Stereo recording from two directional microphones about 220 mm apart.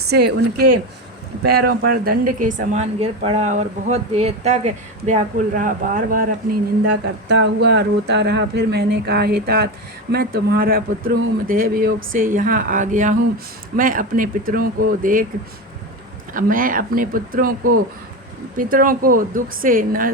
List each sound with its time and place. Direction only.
0.1 s speech: 50° right (ahead or behind)
1.5 s a woman's voice: 45° right (ahead or behind)
16.3 s a woman's voice: 40° right (ahead or behind)
18.5 s a woman's voice: 40° right (ahead or behind)